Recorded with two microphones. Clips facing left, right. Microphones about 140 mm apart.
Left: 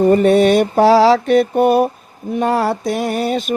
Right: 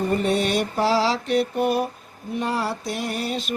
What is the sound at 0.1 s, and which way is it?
Mantra, 55° left (ahead or behind).